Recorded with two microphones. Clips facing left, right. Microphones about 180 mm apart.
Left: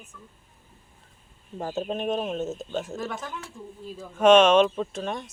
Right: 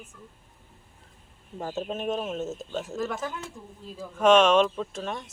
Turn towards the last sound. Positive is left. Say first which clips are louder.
# left 3 dB
turn(degrees=0)  # may be behind; listen again after turning